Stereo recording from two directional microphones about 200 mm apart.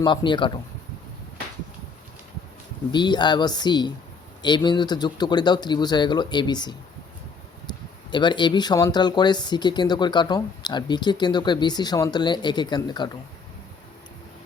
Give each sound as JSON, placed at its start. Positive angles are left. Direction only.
{"t": 0.0, "sound": "speech", "side_deg": 25}
{"t": 2.9, "sound": "speech", "side_deg": 20}
{"t": 8.1, "sound": "speech", "side_deg": 20}